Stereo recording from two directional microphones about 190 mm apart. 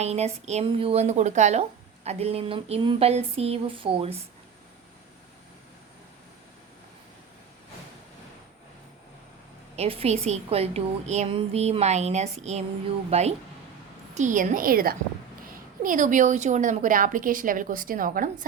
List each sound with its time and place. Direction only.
0.0 s a woman's voice: 35° right (ahead or behind)
9.7 s a woman's voice: 30° right (ahead or behind)